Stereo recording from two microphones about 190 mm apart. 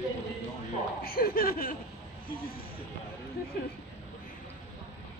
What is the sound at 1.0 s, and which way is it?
Speech, 50° left (ahead or behind).